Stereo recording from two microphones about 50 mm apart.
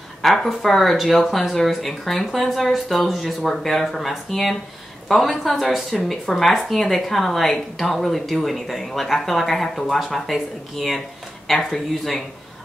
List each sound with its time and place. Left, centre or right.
0.2 s speech: centre